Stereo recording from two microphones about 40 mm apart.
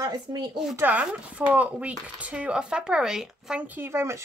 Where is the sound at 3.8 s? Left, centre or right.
Right.